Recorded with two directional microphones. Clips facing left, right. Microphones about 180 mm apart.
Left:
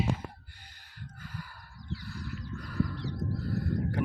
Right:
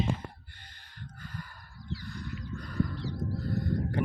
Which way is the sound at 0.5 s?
10° left (ahead or behind).